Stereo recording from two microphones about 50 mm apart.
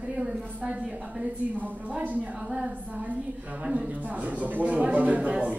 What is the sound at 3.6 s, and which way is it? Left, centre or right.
Speech, centre.